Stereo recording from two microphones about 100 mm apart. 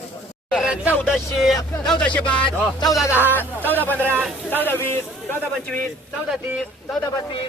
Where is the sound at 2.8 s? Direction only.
35° left (ahead or behind).